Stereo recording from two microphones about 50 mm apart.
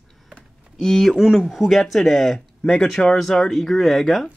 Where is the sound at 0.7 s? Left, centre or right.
Centre.